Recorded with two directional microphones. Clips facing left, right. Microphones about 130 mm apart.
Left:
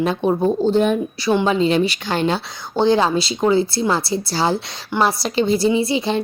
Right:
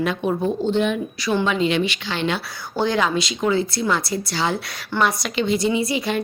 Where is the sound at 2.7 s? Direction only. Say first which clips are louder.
Left 5 dB; 30° left (ahead or behind).